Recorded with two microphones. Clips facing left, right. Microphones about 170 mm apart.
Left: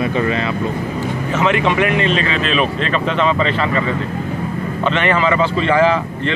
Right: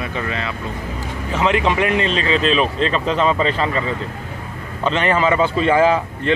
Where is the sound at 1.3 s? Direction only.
30° right (ahead or behind).